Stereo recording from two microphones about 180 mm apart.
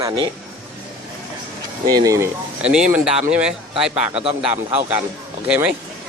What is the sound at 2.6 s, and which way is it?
Speech, 5° right (ahead or behind).